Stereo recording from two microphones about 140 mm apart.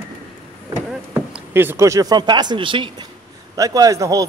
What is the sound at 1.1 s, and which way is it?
Speech, 15° right (ahead or behind).